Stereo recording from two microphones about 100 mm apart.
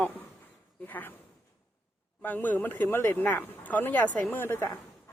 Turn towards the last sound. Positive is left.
turn(degrees=25)  # may be behind; listen again after turning